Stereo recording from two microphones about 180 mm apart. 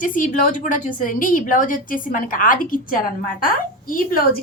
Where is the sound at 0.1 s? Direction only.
45° left (ahead or behind).